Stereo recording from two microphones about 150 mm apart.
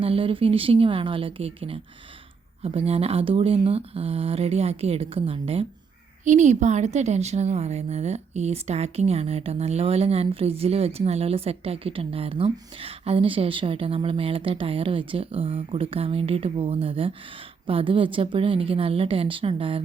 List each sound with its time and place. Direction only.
0.0 s a woman's voice: 35° right (ahead or behind)
6.2 s a woman's voice: 50° right (ahead or behind); by 19.8 s 35° right (ahead or behind)